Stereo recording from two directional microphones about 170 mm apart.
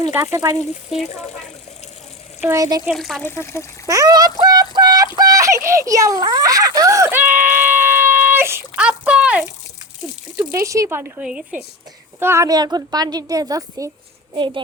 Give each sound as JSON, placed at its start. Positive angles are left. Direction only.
{"t": 0.1, "sound": "speech", "side_deg": -15}
{"t": 0.9, "sound": "speech", "side_deg": 0}
{"t": 2.4, "sound": "a woman's voice", "side_deg": -15}
{"t": 2.8, "sound": "speech", "side_deg": 0}
{"t": 3.2, "sound": "speech", "side_deg": 15}
{"t": 3.8, "sound": "a sound", "side_deg": -20}
{"t": 10.5, "sound": "a woman's voice", "side_deg": -20}